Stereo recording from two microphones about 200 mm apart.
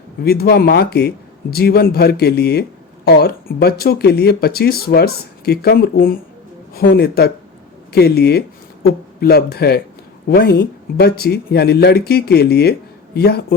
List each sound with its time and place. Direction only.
0.3 s a man's voice: 50° left (ahead or behind)